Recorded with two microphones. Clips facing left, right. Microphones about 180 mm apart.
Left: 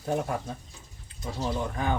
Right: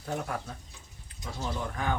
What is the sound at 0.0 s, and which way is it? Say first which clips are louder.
Speech: left 5 dB; 20° left (ahead or behind).